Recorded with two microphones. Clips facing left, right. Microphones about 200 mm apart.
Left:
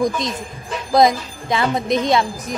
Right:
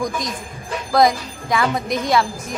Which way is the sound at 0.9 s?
20° left (ahead or behind).